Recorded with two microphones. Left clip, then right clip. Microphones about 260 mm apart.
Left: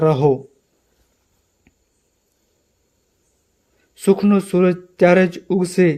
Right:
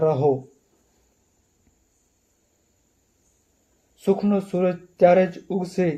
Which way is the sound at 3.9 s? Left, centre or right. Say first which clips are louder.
Left 6 dB; left.